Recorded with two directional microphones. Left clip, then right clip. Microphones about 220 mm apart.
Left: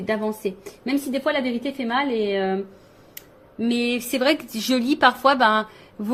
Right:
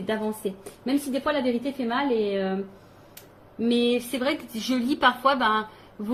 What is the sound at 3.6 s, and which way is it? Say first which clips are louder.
A woman's voice: right 1 dB; 45° left (ahead or behind).